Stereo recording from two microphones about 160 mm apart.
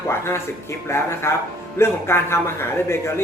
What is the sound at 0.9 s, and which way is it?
Speech, 15° left (ahead or behind).